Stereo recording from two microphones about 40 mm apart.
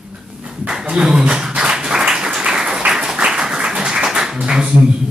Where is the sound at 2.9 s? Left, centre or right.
Centre.